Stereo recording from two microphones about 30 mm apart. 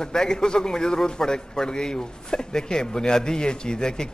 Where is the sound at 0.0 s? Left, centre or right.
Left.